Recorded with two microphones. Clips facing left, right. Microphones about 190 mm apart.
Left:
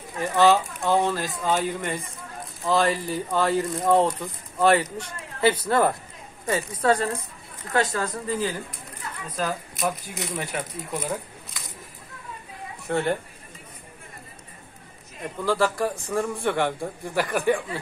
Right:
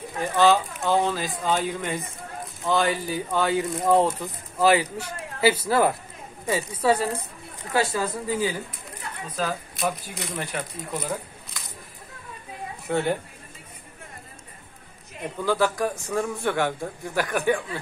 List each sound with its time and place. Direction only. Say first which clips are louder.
0.2 s speech: left 1 dB; centre (ahead or behind)
12.8 s speech: even; centre (ahead or behind)
15.4 s speech: even; centre (ahead or behind)